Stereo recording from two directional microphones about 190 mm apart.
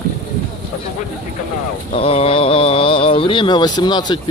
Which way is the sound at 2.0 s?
30° left (ahead or behind).